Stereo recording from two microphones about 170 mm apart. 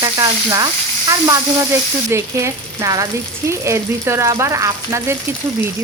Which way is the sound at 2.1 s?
20° right (ahead or behind).